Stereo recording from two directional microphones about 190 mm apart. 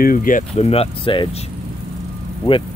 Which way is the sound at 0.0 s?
45° left (ahead or behind).